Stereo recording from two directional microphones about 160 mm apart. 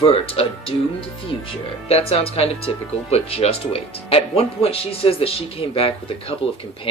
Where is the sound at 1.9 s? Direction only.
40° left (ahead or behind).